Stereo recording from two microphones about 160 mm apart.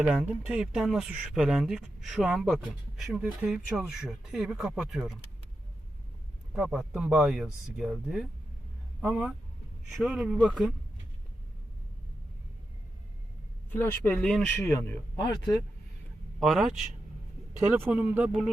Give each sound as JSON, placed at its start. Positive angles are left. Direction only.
{"t": 0.0, "sound": "speech", "side_deg": -10}
{"t": 6.5, "sound": "speech", "side_deg": -5}
{"t": 13.7, "sound": "speech", "side_deg": 15}
{"t": 16.4, "sound": "speech", "side_deg": 0}